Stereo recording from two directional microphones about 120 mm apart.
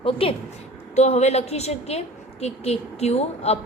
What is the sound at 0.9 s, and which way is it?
A woman's voice, 70° left (ahead or behind).